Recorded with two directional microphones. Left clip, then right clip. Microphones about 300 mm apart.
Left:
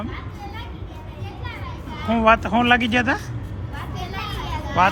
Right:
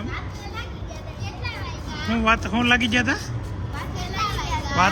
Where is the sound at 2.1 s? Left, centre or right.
Centre.